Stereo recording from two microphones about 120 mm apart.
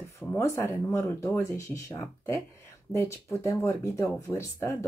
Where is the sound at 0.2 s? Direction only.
20° left (ahead or behind).